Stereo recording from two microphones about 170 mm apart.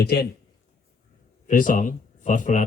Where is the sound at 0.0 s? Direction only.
70° left (ahead or behind).